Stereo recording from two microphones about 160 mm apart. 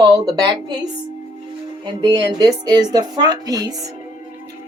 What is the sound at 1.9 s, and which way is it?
A woman's voice, 30° right (ahead or behind).